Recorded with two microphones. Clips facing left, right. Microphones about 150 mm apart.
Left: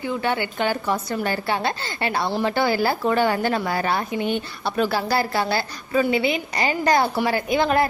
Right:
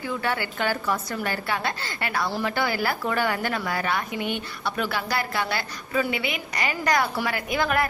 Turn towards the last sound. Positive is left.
turn(degrees=25)  # may be behind; listen again after turning